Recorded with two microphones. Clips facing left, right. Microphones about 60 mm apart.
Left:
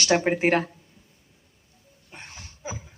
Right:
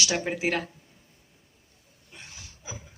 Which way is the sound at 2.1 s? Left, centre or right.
Left.